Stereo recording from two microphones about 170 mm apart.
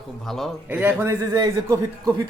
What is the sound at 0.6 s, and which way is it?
A man's voice, 10° right (ahead or behind).